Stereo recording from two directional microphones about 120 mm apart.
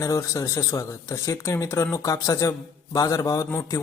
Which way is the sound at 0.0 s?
25° left (ahead or behind).